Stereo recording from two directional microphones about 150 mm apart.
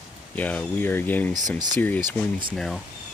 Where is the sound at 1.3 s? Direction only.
25° right (ahead or behind).